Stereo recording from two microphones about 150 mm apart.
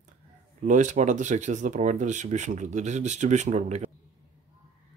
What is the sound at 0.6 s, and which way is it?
Speech, 55° right (ahead or behind).